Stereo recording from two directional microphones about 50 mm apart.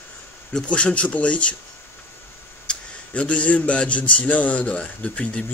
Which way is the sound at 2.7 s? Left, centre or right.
Left.